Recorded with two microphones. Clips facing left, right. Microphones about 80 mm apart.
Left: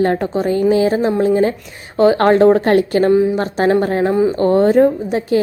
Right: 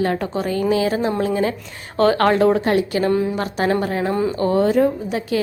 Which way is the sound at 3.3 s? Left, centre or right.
Left.